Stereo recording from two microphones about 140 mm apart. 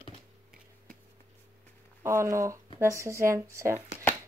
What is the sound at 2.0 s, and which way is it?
Speech, 20° right (ahead or behind).